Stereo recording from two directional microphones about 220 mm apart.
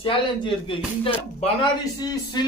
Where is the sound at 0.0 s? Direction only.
25° left (ahead or behind).